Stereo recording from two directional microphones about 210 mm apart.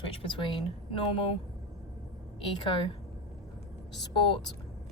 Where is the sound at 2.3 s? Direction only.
25° left (ahead or behind).